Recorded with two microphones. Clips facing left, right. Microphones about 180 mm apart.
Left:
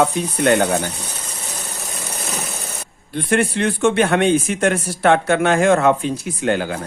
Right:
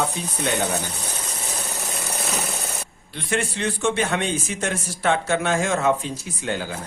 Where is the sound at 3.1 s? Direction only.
55° left (ahead or behind).